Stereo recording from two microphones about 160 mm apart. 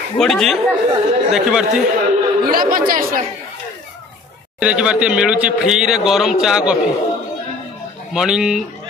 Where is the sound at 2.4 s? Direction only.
65° right (ahead or behind).